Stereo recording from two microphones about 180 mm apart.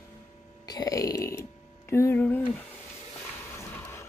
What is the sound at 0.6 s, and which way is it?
Burping, 20° left (ahead or behind).